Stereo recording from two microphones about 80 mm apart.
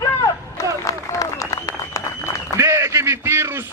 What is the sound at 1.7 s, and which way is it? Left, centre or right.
Applause, left.